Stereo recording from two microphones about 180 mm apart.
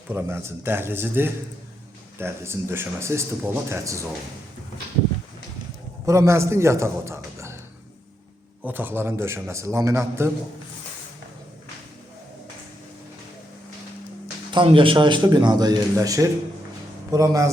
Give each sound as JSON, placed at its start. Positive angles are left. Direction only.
{"t": 0.1, "sound": "a man's voice", "side_deg": -15}
{"t": 6.1, "sound": "a man's voice", "side_deg": -15}
{"t": 8.6, "sound": "a man's voice", "side_deg": -10}
{"t": 14.5, "sound": "a man's voice", "side_deg": -30}